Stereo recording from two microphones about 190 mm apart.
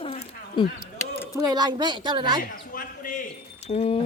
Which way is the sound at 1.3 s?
20° right (ahead or behind).